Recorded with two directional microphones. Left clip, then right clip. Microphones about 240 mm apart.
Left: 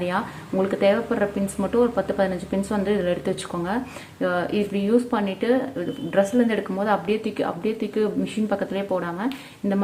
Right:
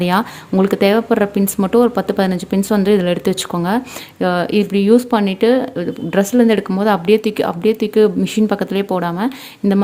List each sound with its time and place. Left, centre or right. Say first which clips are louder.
0.0 s speech: right 9 dB; right